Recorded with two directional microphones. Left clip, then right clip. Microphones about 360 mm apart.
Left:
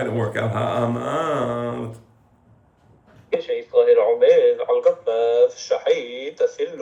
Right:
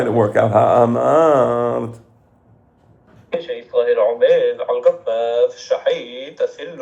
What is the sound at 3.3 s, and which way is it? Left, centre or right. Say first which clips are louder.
A man's voice: left 1 dB; right.